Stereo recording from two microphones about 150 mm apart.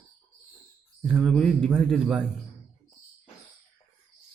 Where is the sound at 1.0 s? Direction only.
Centre (ahead or behind).